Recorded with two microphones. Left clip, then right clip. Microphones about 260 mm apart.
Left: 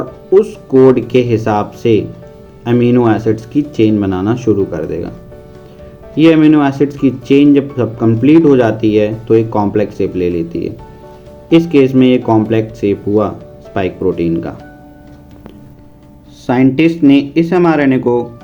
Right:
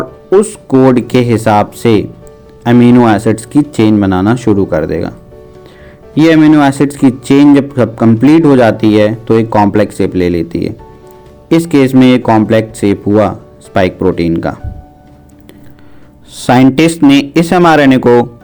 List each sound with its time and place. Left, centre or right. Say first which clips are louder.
0.3 s speech: right 1 dB; right
6.1 s speech: right 2 dB; right
11.7 s speech: right 5 dB; right
16.4 s speech: right 4 dB; right